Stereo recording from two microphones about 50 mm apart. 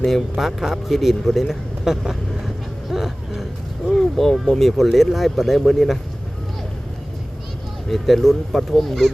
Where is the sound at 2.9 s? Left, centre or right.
Centre.